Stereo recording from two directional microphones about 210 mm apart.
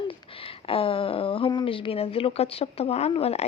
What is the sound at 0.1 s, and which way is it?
A woman's voice, 25° left (ahead or behind).